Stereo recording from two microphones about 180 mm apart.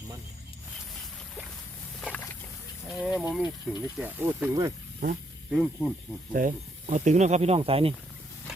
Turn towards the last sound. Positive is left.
turn(degrees=-30)  # may be behind; listen again after turning